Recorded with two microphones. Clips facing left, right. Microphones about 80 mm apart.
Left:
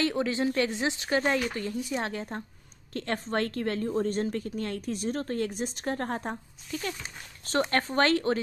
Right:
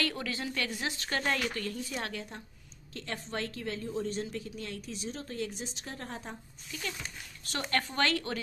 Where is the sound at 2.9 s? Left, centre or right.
Left.